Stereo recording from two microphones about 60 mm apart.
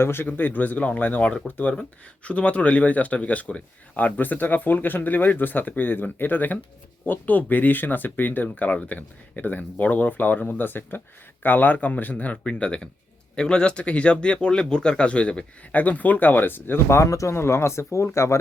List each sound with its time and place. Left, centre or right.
0.0 s speech: left
17.0 s speech: left
17.3 s speech: left